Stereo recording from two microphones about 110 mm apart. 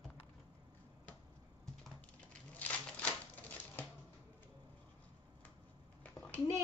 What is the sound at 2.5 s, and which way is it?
Typewriter, 15° left (ahead or behind).